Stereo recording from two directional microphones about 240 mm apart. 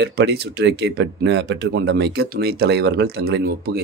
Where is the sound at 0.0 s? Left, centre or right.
Right.